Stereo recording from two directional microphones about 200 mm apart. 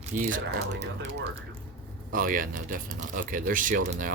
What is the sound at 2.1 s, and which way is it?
Speech, 45° right (ahead or behind).